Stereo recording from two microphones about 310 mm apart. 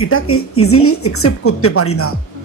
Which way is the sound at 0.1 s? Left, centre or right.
Left.